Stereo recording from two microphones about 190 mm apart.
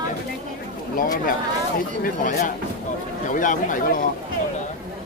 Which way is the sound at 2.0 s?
45° left (ahead or behind).